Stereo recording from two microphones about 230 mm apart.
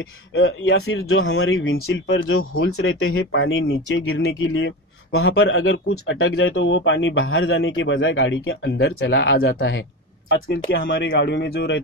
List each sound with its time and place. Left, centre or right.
0.3 s speech: left